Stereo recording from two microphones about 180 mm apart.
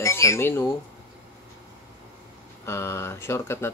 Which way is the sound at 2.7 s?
15° left (ahead or behind).